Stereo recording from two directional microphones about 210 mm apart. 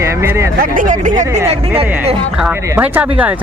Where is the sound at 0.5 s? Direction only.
40° right (ahead or behind).